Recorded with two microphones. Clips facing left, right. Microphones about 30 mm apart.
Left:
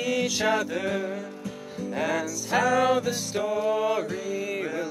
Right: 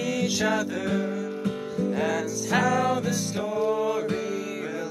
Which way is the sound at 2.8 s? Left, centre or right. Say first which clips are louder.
Left 2 dB; centre.